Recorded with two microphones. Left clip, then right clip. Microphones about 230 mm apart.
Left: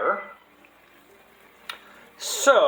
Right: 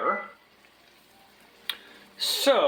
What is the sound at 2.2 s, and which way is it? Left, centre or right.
Speech, right.